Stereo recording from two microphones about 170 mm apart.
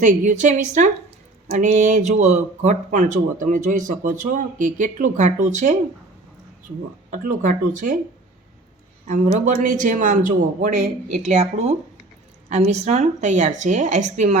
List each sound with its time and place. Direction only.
0.0 s speech: 45° right (ahead or behind)
7.1 s speech: 50° right (ahead or behind)
9.0 s speech: 45° right (ahead or behind)